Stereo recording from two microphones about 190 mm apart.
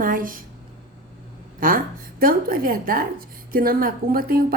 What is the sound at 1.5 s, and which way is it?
A woman's voice, 50° right (ahead or behind).